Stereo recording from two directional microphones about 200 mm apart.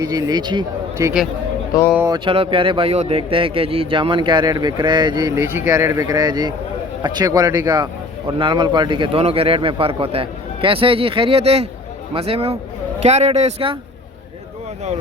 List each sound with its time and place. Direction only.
0.0 s speech: 20° right (ahead or behind)